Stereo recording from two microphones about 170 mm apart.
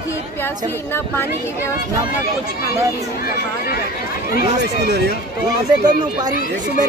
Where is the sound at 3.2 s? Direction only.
60° left (ahead or behind).